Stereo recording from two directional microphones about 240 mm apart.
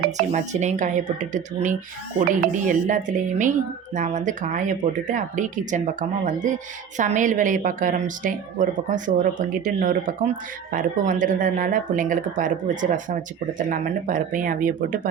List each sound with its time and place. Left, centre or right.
0.2 s a woman's voice: right